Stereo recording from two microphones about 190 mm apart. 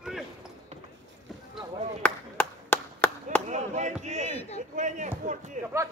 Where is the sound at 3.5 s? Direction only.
40° right (ahead or behind).